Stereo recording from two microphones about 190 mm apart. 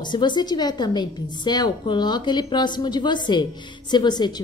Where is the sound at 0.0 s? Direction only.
25° left (ahead or behind).